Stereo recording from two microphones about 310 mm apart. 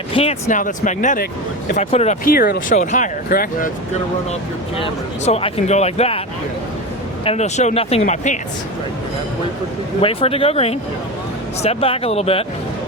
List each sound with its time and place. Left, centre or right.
0.1 s speech: centre
4.8 s speech: centre
7.3 s speech: left
10.0 s speech: centre